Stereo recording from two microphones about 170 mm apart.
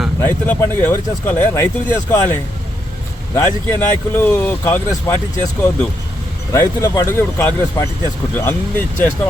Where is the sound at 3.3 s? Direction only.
15° left (ahead or behind).